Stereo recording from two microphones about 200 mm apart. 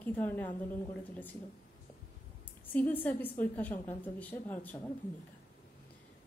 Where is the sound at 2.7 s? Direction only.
10° left (ahead or behind).